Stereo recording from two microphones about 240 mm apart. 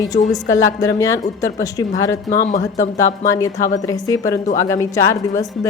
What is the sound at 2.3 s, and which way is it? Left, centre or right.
Speech, left.